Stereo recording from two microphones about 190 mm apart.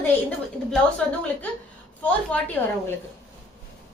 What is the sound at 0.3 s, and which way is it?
A child's voice, 5° left (ahead or behind).